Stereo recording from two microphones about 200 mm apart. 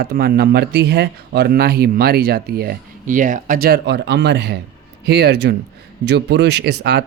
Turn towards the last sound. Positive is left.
turn(degrees=-55)  # may be behind; listen again after turning